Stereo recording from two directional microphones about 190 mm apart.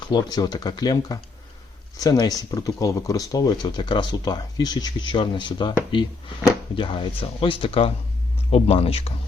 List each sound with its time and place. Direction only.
0.1 s speech: 20° left (ahead or behind)